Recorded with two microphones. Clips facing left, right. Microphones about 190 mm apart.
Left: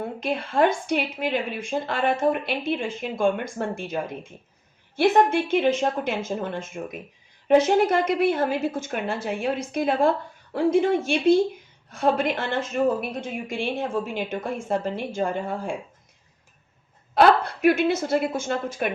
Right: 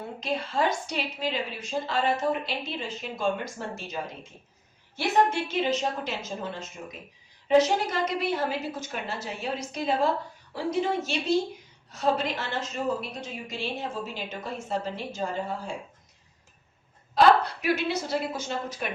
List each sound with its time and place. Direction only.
0.2 s a woman's voice: 55° left (ahead or behind)
17.2 s a woman's voice: 55° left (ahead or behind)